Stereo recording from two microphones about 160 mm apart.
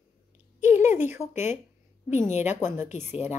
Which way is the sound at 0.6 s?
15° right (ahead or behind).